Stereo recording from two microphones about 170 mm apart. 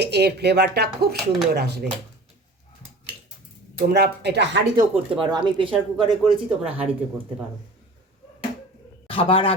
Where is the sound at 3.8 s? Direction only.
80° right.